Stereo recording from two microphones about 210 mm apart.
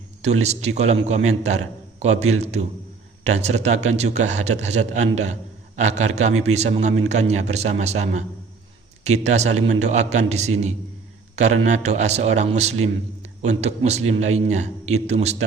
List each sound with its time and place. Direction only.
0.2 s a man's voice: 30° right (ahead or behind)
9.2 s a man's voice: 30° right (ahead or behind)
11.6 s a man's voice: 35° right (ahead or behind)